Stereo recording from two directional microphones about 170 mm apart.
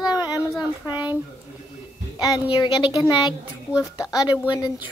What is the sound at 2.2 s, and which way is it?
Speech, 25° left (ahead or behind).